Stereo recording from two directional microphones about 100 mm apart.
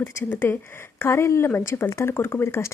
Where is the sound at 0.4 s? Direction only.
25° left (ahead or behind).